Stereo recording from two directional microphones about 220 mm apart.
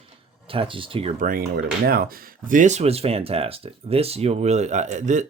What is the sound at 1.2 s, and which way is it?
Speech, 40° right (ahead or behind).